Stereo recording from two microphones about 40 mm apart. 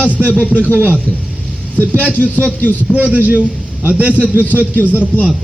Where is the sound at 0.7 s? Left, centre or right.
Right.